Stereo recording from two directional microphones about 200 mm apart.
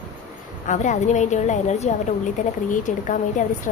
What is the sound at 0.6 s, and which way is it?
A woman's voice, 35° left (ahead or behind).